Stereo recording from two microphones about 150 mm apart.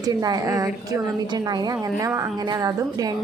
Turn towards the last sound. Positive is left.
turn(degrees=-20)  # may be behind; listen again after turning